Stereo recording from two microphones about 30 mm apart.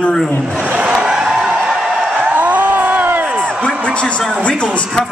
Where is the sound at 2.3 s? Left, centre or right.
Right.